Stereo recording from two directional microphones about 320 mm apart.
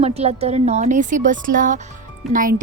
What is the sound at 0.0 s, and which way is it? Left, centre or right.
A woman's voice, centre.